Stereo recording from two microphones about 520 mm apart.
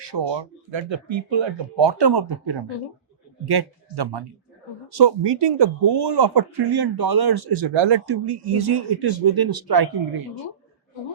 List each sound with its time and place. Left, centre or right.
0.0 s speech: right